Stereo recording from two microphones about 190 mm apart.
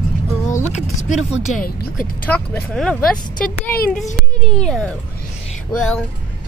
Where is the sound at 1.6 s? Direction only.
45° left (ahead or behind).